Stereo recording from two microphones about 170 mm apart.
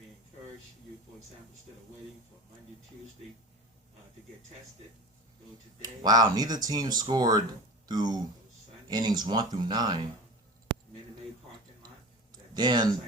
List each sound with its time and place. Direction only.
5.8 s speech: 25° right (ahead or behind)
12.5 s speech: 25° right (ahead or behind)